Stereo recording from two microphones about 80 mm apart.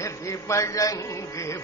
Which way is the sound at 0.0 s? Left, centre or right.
Left.